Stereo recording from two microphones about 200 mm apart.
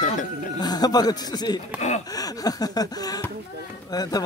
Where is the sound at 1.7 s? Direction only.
35° left (ahead or behind).